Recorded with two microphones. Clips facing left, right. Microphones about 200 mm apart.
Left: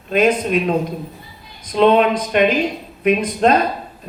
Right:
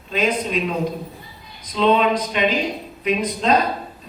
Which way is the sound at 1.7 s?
55° left (ahead or behind).